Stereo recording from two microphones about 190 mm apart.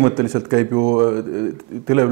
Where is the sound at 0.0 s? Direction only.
20° right (ahead or behind).